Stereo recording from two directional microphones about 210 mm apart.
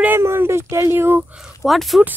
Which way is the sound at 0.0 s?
10° right (ahead or behind).